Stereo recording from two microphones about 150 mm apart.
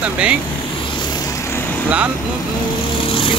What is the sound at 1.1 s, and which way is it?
Vehicle, 25° left (ahead or behind).